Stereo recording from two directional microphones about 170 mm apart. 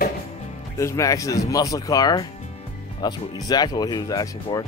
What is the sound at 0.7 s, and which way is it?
Speech, 20° left (ahead or behind).